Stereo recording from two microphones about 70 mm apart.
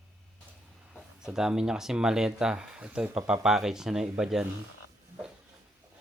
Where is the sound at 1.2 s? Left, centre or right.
Centre.